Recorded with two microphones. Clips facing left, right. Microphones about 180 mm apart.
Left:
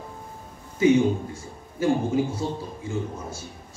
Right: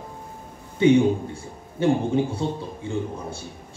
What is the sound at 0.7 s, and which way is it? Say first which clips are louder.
A man's voice: right 2 dB; 30° right (ahead or behind).